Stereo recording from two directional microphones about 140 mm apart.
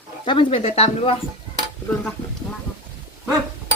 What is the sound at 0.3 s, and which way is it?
Speech, 40° left (ahead or behind).